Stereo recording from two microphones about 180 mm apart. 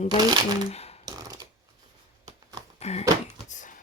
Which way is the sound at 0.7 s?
35° left (ahead or behind).